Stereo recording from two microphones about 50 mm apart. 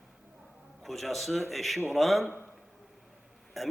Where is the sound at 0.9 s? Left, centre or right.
Centre.